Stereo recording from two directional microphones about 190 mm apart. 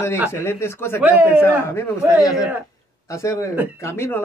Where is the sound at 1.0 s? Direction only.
10° right (ahead or behind).